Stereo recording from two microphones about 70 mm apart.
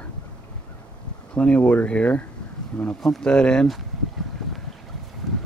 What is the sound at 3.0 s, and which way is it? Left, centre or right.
Speech, centre.